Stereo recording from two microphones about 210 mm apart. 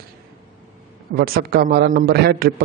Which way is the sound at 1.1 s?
45° right (ahead or behind).